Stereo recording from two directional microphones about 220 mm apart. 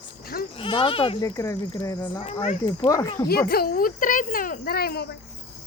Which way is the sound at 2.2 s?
30° left (ahead or behind).